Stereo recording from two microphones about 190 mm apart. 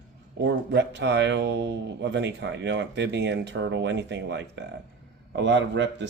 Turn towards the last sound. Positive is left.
turn(degrees=-65)  # may be behind; listen again after turning